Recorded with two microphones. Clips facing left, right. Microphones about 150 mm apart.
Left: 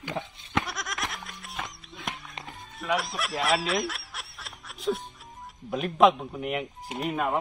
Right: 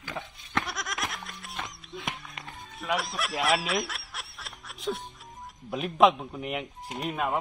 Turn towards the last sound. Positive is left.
turn(degrees=0)  # may be behind; listen again after turning